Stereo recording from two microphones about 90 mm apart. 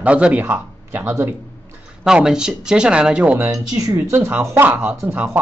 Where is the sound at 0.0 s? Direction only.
15° right (ahead or behind).